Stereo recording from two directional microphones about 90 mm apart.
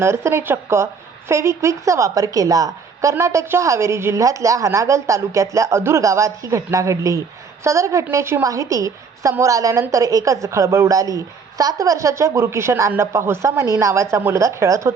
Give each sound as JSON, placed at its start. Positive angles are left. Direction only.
{"t": 0.0, "sound": "a woman's voice", "side_deg": -30}